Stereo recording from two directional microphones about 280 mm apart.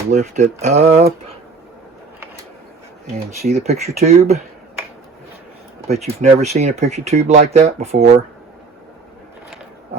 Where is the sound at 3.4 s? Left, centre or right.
Right.